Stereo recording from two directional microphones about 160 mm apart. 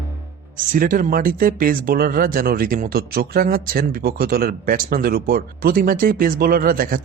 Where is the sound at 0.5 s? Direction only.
55° right (ahead or behind).